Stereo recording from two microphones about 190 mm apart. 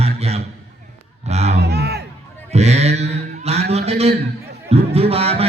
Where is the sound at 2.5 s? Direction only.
35° right (ahead or behind).